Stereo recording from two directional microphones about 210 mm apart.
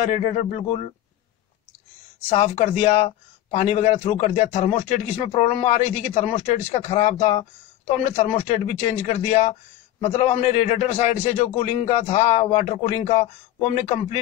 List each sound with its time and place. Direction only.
0.1 s speech: 35° left (ahead or behind)
2.3 s speech: 30° left (ahead or behind)